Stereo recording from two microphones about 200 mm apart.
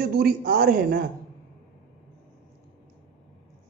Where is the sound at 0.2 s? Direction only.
50° right (ahead or behind).